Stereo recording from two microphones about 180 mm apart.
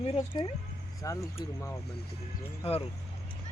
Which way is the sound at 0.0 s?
25° left (ahead or behind).